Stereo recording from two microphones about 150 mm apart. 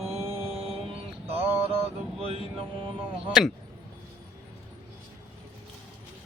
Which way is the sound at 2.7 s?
35° right (ahead or behind).